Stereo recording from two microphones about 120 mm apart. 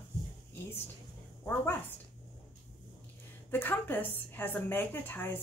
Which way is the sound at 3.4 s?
15° left (ahead or behind).